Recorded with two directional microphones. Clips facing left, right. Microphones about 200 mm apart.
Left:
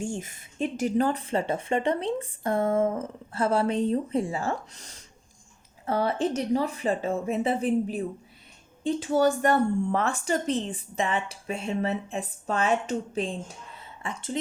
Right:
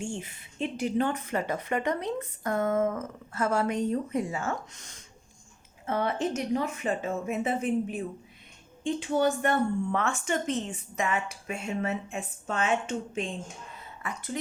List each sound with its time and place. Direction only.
0.0 s speech: 45° left (ahead or behind); by 14.3 s 25° left (ahead or behind)